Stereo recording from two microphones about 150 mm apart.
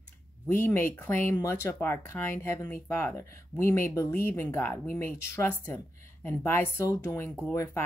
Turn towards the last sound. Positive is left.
turn(degrees=20)  # may be behind; listen again after turning